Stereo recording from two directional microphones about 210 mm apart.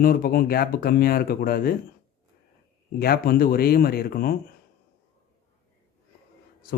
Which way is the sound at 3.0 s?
45° left (ahead or behind).